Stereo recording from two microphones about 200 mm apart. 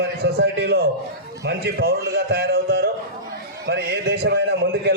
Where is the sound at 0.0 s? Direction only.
55° right (ahead or behind).